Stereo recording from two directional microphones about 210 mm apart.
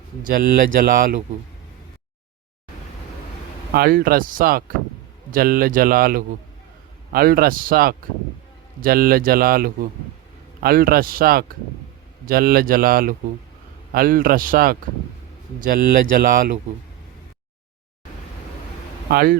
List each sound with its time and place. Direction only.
0.2 s speech: 40° right (ahead or behind)
3.8 s speech: 45° right (ahead or behind)
19.1 s speech: 45° right (ahead or behind)